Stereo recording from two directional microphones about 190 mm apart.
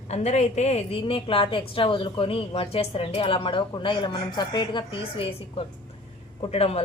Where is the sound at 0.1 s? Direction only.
35° left (ahead or behind).